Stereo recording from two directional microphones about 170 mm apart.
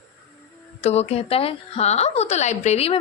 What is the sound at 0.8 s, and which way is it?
A woman's voice, 40° left (ahead or behind).